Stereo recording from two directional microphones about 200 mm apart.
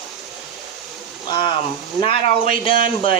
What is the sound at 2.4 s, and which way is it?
Speech, 45° right (ahead or behind).